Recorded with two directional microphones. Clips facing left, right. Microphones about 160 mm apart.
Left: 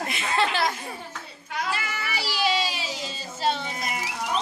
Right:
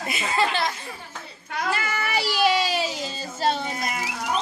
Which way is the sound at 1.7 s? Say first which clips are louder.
Right 5 dB; 50° right (ahead or behind).